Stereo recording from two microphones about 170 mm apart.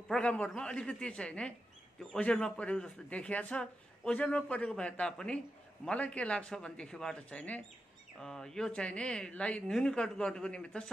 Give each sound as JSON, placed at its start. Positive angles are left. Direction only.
{"t": 0.1, "sound": "a man's voice", "side_deg": 5}